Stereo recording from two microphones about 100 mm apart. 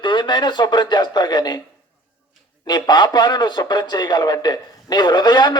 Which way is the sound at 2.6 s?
45° left (ahead or behind).